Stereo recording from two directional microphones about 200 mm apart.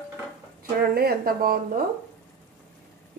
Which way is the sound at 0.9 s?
50° right (ahead or behind).